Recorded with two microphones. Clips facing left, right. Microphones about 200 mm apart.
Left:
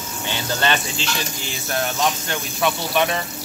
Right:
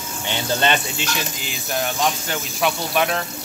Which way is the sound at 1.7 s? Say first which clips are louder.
Even; centre (ahead or behind).